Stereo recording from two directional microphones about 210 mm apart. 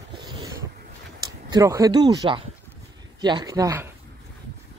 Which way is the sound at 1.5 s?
15° right (ahead or behind).